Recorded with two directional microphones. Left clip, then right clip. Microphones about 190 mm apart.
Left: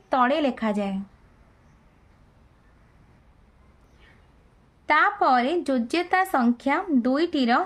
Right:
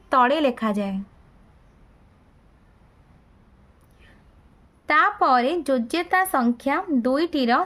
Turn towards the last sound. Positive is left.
turn(degrees=-20)  # may be behind; listen again after turning